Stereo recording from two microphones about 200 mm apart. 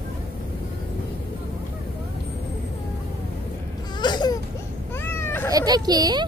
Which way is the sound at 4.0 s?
20° left (ahead or behind).